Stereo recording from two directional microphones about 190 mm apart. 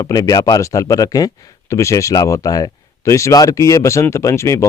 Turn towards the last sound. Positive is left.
turn(degrees=15)  # may be behind; listen again after turning